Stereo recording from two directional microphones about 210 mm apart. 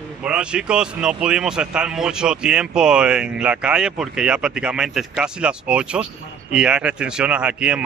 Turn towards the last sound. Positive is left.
turn(degrees=-5)  # may be behind; listen again after turning